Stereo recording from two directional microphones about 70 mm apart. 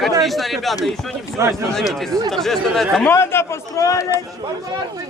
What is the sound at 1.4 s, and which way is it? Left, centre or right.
Speech, right.